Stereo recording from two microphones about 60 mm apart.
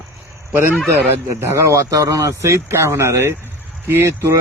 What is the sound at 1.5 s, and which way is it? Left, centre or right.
Speech, right.